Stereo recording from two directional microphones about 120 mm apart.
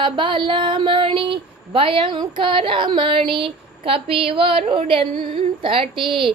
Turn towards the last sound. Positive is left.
turn(degrees=-45)  # may be behind; listen again after turning